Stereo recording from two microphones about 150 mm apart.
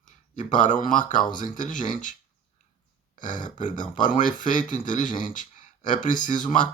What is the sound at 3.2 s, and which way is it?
Speech, 60° left (ahead or behind).